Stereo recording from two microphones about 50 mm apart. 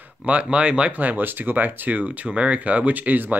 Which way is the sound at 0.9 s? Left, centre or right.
Right.